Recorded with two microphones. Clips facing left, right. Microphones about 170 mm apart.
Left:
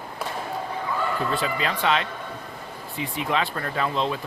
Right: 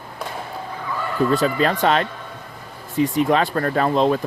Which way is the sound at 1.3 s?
40° right (ahead or behind).